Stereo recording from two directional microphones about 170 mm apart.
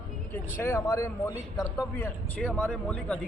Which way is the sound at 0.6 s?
15° left (ahead or behind).